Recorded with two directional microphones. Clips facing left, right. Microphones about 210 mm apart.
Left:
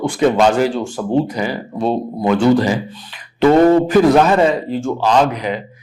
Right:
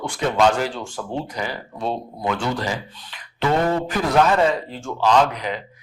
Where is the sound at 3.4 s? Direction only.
40° left (ahead or behind).